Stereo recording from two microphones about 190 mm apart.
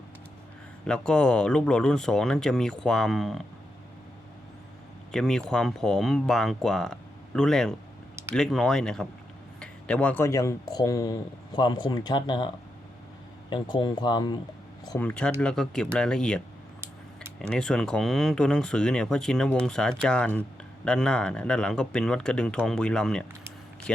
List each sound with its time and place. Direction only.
0.9 s speech: 5° left (ahead or behind)
5.1 s speech: 5° left (ahead or behind); by 12.5 s 25° left (ahead or behind)
13.5 s speech: 25° left (ahead or behind)
14.8 s speech: 10° left (ahead or behind)
16.8 s a sound: 15° right (ahead or behind)
17.5 s speech: 5° left (ahead or behind)